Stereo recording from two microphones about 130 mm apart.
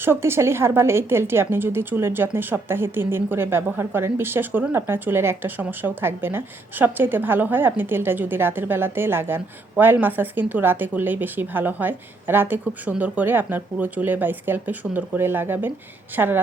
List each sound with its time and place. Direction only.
0.0 s a woman's voice: 20° right (ahead or behind)